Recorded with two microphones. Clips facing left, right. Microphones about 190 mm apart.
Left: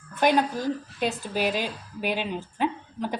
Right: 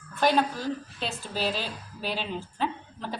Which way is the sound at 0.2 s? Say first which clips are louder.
Left 2 dB; 15° left (ahead or behind).